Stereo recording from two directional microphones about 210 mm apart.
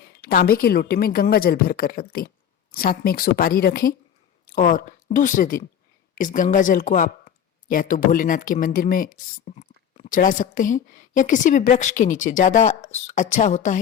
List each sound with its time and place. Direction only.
0.2 s a woman's voice: 45° left (ahead or behind)